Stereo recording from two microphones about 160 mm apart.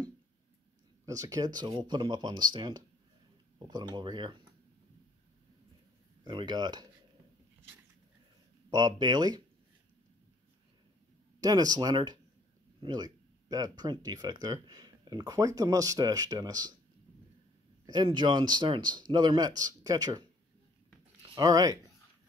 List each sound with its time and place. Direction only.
1.0 s speech: 20° right (ahead or behind)
6.2 s speech: 30° right (ahead or behind)
8.6 s speech: 25° right (ahead or behind)
11.4 s speech: 25° right (ahead or behind)
17.8 s speech: 25° right (ahead or behind)
21.4 s speech: 25° right (ahead or behind)